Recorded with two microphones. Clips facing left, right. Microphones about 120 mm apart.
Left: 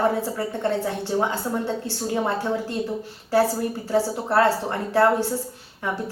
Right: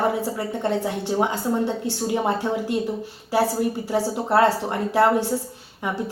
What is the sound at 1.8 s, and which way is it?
Speech, 15° right (ahead or behind).